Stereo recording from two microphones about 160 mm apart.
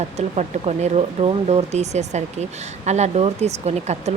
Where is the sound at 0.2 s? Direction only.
45° right (ahead or behind).